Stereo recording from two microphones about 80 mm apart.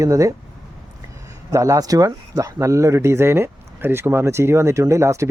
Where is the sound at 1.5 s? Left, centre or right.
Right.